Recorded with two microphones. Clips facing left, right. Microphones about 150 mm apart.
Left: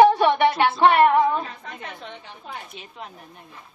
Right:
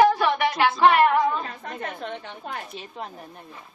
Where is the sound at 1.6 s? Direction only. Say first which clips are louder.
Right 4 dB; 45° right (ahead or behind).